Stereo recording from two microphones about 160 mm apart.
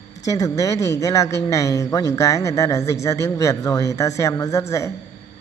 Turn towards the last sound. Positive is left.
turn(degrees=20)  # may be behind; listen again after turning